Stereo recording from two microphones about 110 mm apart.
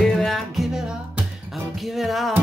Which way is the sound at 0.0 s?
5° left (ahead or behind).